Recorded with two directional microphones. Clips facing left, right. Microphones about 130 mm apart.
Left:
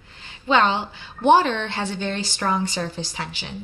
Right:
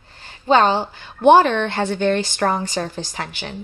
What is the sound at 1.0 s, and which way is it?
A woman's voice, 55° right (ahead or behind).